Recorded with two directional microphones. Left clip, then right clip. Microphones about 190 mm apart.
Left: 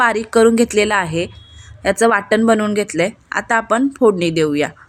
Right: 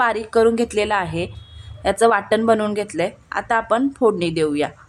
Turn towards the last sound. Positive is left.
turn(degrees=10)  # may be behind; listen again after turning